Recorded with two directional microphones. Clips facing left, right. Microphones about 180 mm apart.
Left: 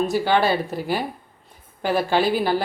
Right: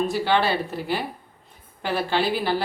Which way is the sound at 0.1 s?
45° left (ahead or behind).